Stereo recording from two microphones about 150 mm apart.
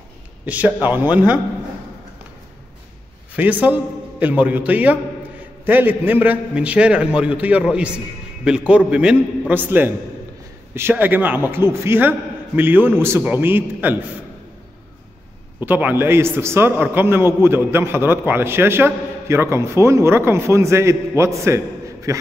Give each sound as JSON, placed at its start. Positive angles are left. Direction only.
{"t": 0.5, "sound": "a man's voice", "side_deg": -10}
{"t": 3.3, "sound": "a man's voice", "side_deg": -10}
{"t": 15.6, "sound": "a man's voice", "side_deg": -10}